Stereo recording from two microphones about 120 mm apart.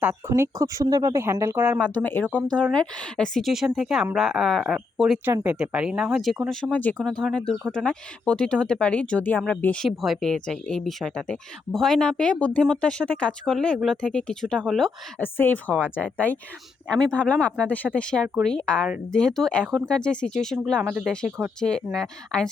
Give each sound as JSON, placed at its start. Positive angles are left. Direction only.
{"t": 0.3, "sound": "speech", "side_deg": -25}
{"t": 1.8, "sound": "speech", "side_deg": 15}
{"t": 5.2, "sound": "speech", "side_deg": -15}
{"t": 15.2, "sound": "speech", "side_deg": 15}
{"t": 15.7, "sound": "speech", "side_deg": -10}
{"t": 16.1, "sound": "speech", "side_deg": 15}
{"t": 21.9, "sound": "speech", "side_deg": 5}